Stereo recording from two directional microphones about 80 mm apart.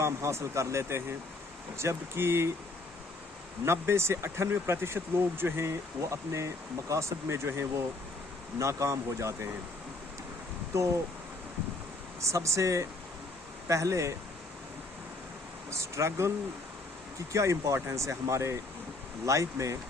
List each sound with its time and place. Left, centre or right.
0.0 s speech: right
3.7 s speech: right
10.7 s speech: right
12.2 s speech: right
15.7 s speech: right
17.3 s speech: right